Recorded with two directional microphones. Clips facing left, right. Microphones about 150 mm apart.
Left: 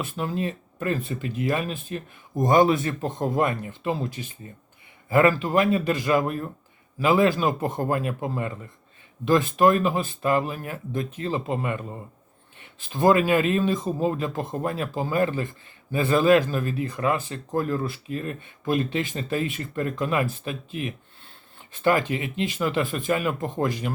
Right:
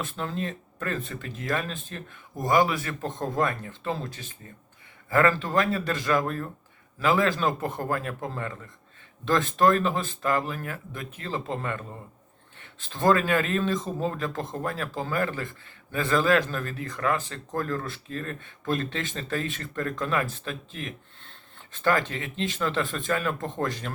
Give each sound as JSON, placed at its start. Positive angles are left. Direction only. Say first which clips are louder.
{"t": 0.0, "sound": "a man's voice", "louder": "left 4 dB", "side_deg": 15}